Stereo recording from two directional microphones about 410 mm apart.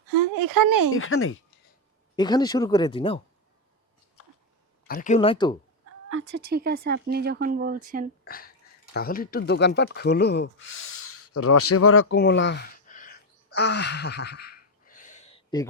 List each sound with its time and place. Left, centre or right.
0.3 s speech: right
0.9 s speech: left
2.1 s speech: centre
4.9 s speech: centre
6.1 s speech: right
8.2 s speech: left